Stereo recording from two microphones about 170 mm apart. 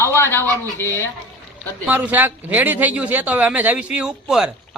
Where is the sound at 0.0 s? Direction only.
15° left (ahead or behind).